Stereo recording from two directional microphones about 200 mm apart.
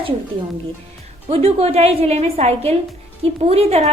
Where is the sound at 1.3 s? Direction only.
30° right (ahead or behind).